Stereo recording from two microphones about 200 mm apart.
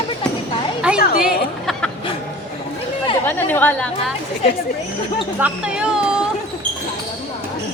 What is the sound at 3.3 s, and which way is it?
Speech, 10° left (ahead or behind).